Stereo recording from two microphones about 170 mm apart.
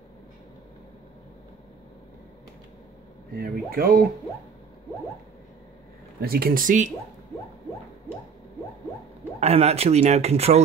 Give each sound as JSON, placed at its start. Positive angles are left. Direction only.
{"t": 3.3, "sound": "speech", "side_deg": -65}
{"t": 6.2, "sound": "speech", "side_deg": -60}
{"t": 9.4, "sound": "speech", "side_deg": -40}